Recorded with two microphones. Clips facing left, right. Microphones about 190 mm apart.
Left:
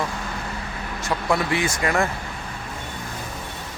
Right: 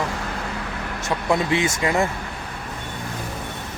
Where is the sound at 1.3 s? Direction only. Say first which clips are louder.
Right 2 dB; 20° right (ahead or behind).